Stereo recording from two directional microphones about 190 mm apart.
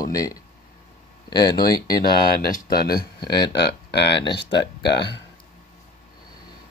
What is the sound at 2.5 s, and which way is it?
Speech, 55° left (ahead or behind).